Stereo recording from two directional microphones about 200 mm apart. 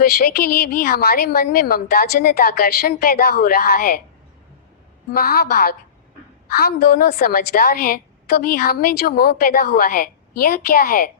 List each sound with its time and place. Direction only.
0.0 s a woman's voice: 50° left (ahead or behind)
5.1 s a woman's voice: 50° left (ahead or behind)